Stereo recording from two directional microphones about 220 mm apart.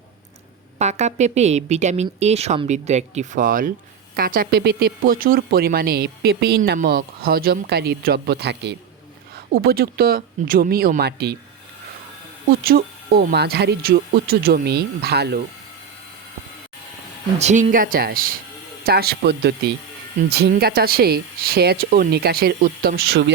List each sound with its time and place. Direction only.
0.8 s a woman's voice: 30° right (ahead or behind); by 11.3 s 45° right (ahead or behind)
12.5 s speech: 45° right (ahead or behind)
17.4 s a woman's voice: 35° right (ahead or behind)